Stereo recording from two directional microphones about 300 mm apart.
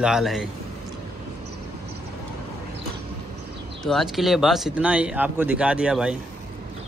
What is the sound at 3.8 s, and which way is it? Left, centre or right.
Speech, centre.